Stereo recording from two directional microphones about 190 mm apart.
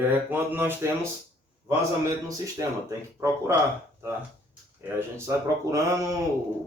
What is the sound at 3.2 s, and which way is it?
Speech, 15° right (ahead or behind).